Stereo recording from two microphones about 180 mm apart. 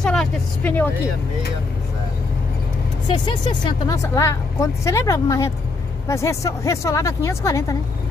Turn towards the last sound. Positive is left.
turn(degrees=15)  # may be behind; listen again after turning